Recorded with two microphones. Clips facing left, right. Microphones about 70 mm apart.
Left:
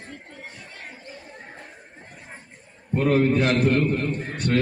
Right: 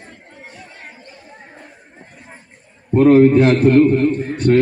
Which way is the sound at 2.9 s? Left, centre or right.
Right.